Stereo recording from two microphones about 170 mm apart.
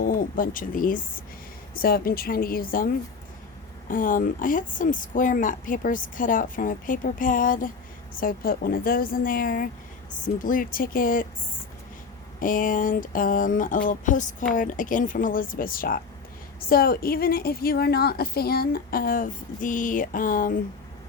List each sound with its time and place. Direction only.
0.0 s a woman's voice: 55° left (ahead or behind)
12.4 s a woman's voice: 55° left (ahead or behind)